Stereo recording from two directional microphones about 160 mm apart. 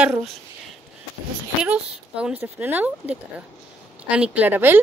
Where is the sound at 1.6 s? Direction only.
5° right (ahead or behind).